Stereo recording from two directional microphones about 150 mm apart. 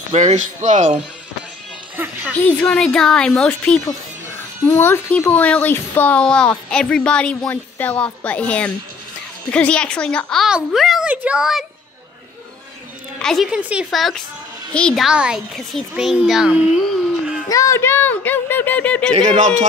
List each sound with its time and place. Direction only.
0.1 s speech: 50° right (ahead or behind)
2.0 s speech: 15° right (ahead or behind)
2.3 s a woman's voice: 5° left (ahead or behind)
13.2 s a woman's voice: centre (ahead or behind)
17.5 s speech: 20° left (ahead or behind)
19.1 s speech: 50° right (ahead or behind)